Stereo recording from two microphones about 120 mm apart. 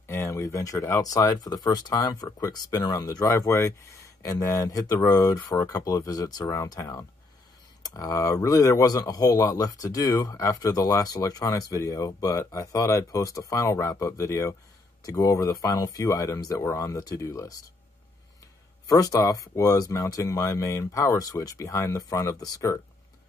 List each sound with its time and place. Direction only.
0.0 s speech: 20° left (ahead or behind)
18.9 s speech: 30° left (ahead or behind)